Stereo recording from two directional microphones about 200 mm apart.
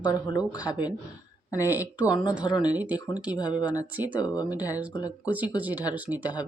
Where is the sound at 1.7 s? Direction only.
10° right (ahead or behind).